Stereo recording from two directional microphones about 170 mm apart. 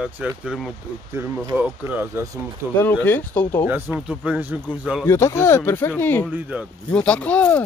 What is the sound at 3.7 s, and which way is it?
A man's voice, 10° right (ahead or behind).